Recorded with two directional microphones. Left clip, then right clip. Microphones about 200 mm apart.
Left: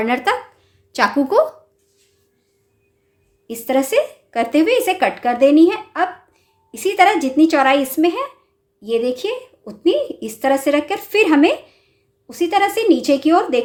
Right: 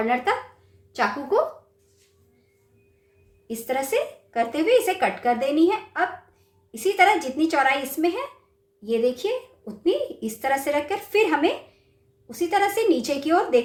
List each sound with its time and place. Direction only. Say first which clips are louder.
0.0 s a woman's voice: left 5 dB; 55° left (ahead or behind)
3.4 s a woman's voice: left 8 dB; 50° left (ahead or behind)